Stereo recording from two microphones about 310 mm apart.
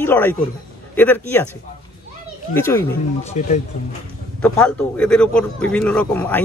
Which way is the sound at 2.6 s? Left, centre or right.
Centre.